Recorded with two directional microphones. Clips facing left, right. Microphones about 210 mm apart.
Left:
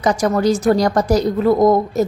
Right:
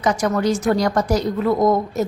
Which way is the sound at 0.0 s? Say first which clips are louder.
Left 3 dB; 35° left (ahead or behind).